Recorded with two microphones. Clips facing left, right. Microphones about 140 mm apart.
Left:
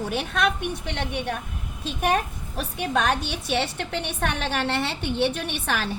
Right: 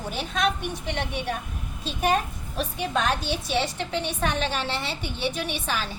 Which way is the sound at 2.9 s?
60° left (ahead or behind).